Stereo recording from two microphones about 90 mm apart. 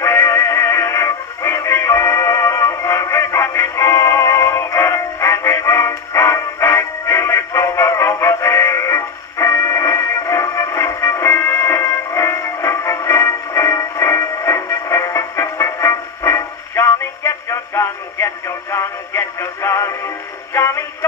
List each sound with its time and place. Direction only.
0.0 s music: 30° left (ahead or behind)
20.5 s synthetic singing: 30° left (ahead or behind)